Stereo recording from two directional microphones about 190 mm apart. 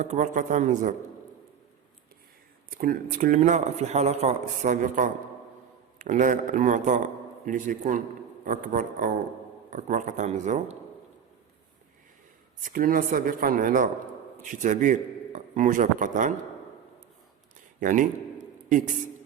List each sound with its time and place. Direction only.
0.0 s a man's voice: 40° right (ahead or behind)
2.6 s a man's voice: 50° right (ahead or behind)
12.6 s a man's voice: 45° right (ahead or behind)
17.7 s a sound: 45° right (ahead or behind)